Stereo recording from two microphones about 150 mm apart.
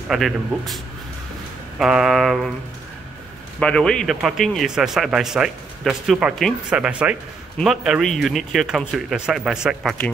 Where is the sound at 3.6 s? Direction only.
5° left (ahead or behind).